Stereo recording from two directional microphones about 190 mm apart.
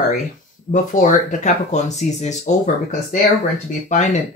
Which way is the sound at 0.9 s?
40° left (ahead or behind).